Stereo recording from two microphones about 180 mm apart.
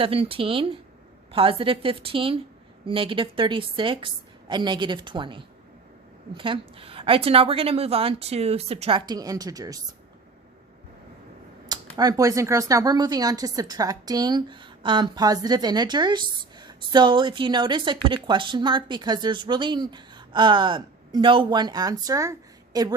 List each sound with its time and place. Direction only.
0.0 s a woman's voice: 30° right (ahead or behind)
11.9 s speech: 20° right (ahead or behind)